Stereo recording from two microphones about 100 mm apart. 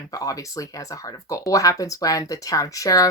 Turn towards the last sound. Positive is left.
turn(degrees=35)  # may be behind; listen again after turning